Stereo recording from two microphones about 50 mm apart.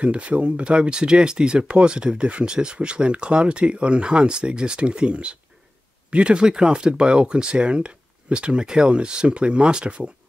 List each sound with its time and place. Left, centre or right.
0.0 s speech: right